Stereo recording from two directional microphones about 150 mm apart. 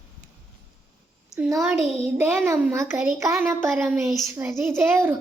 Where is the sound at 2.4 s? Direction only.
20° right (ahead or behind).